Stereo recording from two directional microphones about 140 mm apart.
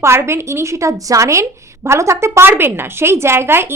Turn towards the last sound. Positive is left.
turn(degrees=-15)  # may be behind; listen again after turning